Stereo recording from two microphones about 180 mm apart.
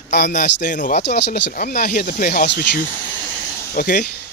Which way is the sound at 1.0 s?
65° left (ahead or behind).